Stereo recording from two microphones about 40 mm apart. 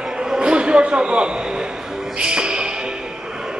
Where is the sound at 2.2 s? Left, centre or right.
Right.